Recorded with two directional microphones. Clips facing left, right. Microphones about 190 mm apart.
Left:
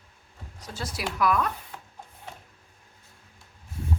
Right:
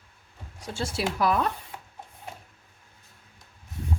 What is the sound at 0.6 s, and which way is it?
Speech, 25° right (ahead or behind).